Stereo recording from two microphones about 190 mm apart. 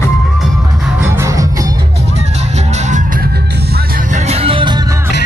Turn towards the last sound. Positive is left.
turn(degrees=-25)  # may be behind; listen again after turning